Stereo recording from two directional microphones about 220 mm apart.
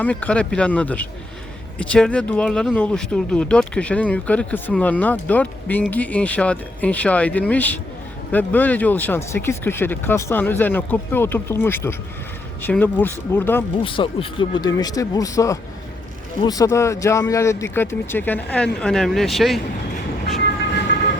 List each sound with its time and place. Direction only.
0.0 s speech: 5° left (ahead or behind)
13.8 s speech: 25° left (ahead or behind); by 19.5 s centre (ahead or behind)